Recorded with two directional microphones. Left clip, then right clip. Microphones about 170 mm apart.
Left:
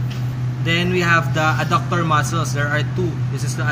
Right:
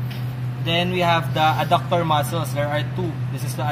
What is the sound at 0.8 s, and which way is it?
Speech, 30° right (ahead or behind).